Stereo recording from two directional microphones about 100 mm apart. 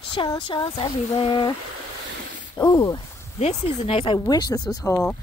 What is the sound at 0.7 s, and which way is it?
Speech, 65° left (ahead or behind).